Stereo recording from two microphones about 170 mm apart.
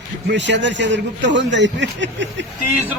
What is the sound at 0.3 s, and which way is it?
A man's voice, 90° right.